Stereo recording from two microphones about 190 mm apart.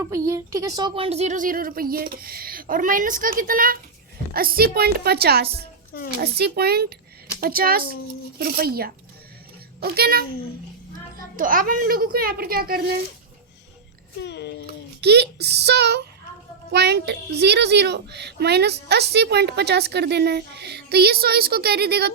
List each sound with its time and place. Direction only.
0.0 s a woman's voice: 15° right (ahead or behind); by 5.6 s 55° right (ahead or behind)
5.9 s a woman's voice: 55° left (ahead or behind)
6.1 s a woman's voice: 60° right (ahead or behind)
14.2 s speech: 60° left (ahead or behind)
15.0 s a woman's voice: 60° right (ahead or behind)